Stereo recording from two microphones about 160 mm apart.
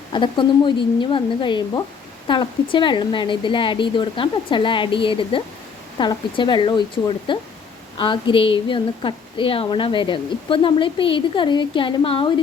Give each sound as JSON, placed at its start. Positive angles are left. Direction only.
{"t": 0.1, "sound": "a woman's voice", "side_deg": 30}